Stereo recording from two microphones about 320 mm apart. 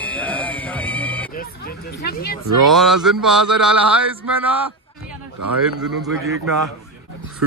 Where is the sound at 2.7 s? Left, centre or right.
Centre.